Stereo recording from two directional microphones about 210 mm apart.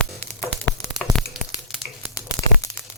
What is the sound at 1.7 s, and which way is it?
Tearing, centre (ahead or behind).